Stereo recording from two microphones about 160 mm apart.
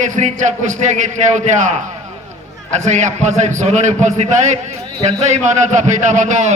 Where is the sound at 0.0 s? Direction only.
50° right (ahead or behind).